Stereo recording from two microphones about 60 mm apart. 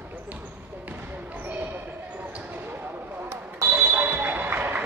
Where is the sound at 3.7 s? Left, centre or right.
Right.